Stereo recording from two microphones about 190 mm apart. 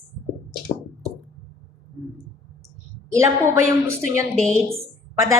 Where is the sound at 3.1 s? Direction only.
15° right (ahead or behind).